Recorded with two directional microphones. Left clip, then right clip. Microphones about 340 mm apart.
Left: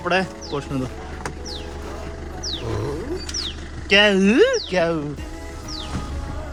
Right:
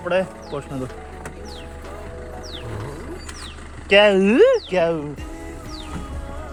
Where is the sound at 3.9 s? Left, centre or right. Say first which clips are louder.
Right 2 dB; centre.